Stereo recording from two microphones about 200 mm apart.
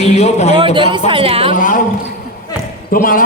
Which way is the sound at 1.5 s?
40° left (ahead or behind).